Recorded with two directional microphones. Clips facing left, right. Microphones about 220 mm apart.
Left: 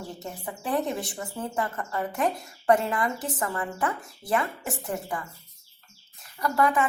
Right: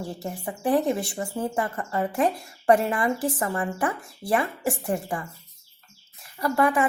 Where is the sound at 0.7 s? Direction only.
30° right (ahead or behind).